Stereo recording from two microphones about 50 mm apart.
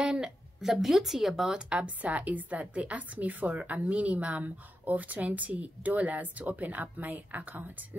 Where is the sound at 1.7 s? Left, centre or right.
Right.